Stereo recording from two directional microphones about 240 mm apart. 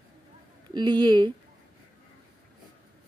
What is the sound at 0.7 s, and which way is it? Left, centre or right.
Speech, centre.